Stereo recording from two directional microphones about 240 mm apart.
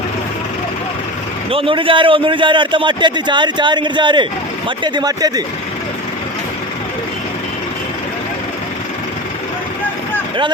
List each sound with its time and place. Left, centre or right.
1.5 s a man's voice: right